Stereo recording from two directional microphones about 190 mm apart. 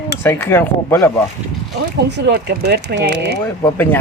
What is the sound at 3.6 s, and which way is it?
Speech, 10° left (ahead or behind).